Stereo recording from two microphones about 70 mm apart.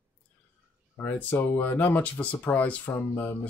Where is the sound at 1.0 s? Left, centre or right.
Left.